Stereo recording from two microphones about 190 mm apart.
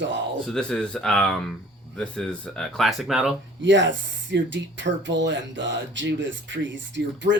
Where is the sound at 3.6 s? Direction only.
70° right (ahead or behind).